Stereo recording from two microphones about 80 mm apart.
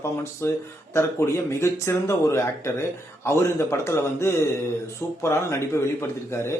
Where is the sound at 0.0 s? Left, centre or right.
Left.